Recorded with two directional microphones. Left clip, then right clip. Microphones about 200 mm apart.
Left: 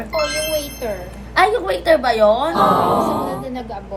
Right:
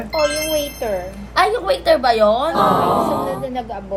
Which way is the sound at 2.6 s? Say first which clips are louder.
Even; centre (ahead or behind).